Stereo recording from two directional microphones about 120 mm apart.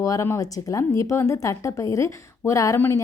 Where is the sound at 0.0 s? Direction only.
25° left (ahead or behind).